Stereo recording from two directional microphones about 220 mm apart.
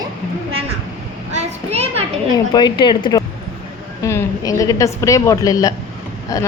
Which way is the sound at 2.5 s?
20° left (ahead or behind).